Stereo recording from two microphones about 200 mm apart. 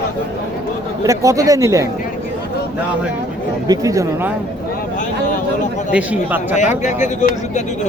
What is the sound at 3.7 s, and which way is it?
Speech, 15° right (ahead or behind).